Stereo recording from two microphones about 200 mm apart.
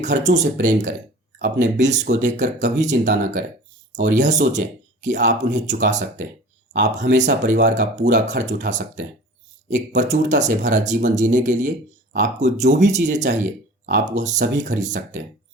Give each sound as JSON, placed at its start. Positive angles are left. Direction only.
{"t": 0.0, "sound": "speech", "side_deg": -35}